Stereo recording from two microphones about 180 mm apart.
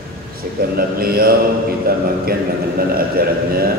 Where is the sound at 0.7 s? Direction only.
55° right (ahead or behind).